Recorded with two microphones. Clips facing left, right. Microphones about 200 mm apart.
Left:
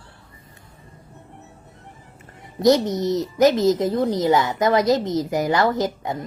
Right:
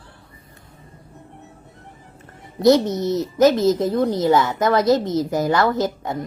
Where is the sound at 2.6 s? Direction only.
20° left (ahead or behind).